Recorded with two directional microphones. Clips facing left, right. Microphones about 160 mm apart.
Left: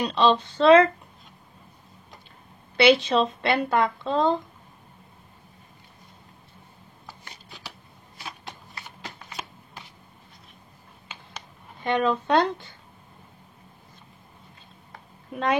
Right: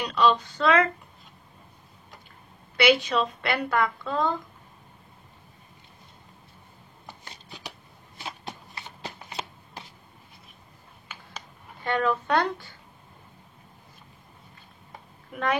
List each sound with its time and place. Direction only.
0.0 s a woman's voice: 25° left (ahead or behind)
2.8 s a woman's voice: 30° left (ahead or behind)
8.3 s shuffling cards: 25° right (ahead or behind)
11.1 s a sound: 20° left (ahead or behind)
11.8 s a woman's voice: 20° left (ahead or behind)
15.3 s a woman's voice: 20° left (ahead or behind)